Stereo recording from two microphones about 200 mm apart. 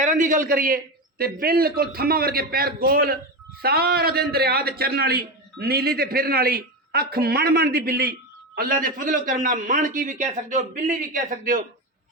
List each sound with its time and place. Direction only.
0.0 s a man's voice: 40° right (ahead or behind)